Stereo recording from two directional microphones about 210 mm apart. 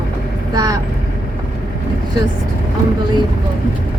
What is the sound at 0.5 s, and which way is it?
Speech, 15° right (ahead or behind).